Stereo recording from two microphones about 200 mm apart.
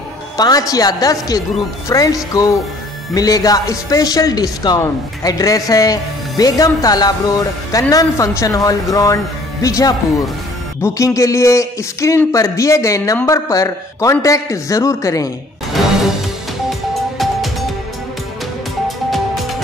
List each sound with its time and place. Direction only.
0.4 s a man's voice: 20° left (ahead or behind)
17.2 s music: centre (ahead or behind)
18.9 s music: centre (ahead or behind)